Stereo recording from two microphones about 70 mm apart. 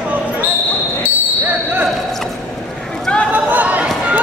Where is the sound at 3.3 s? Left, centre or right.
Right.